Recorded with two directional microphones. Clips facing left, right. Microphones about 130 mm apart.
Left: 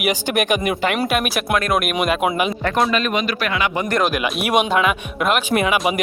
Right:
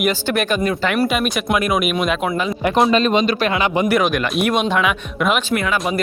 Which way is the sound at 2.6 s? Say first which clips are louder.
Right 7 dB; 25° right (ahead or behind).